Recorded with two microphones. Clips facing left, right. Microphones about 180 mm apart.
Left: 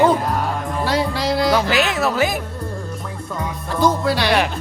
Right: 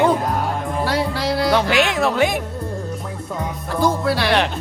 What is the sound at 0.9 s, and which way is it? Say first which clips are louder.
Music: left 3 dB; 90° left.